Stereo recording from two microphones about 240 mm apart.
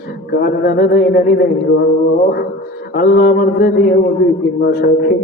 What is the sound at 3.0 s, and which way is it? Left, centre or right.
A man's voice, left.